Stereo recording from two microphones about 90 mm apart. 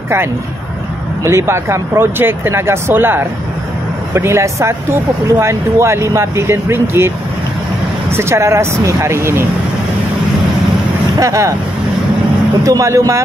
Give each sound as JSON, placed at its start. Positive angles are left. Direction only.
{"t": 1.2, "sound": "speech", "side_deg": -30}
{"t": 8.1, "sound": "speech", "side_deg": -30}
{"t": 11.1, "sound": "speech", "side_deg": -35}
{"t": 12.6, "sound": "speech", "side_deg": -35}